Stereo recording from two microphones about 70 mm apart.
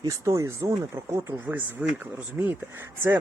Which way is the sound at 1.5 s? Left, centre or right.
Right.